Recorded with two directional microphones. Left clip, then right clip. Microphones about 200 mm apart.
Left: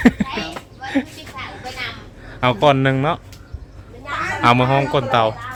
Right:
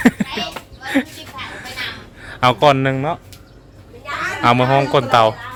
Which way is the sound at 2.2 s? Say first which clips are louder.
Right 2 dB; 15° right (ahead or behind).